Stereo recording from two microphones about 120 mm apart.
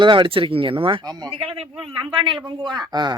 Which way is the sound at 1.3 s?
50° right (ahead or behind).